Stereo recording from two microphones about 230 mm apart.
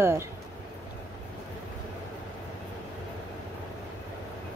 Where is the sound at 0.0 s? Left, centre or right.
Centre.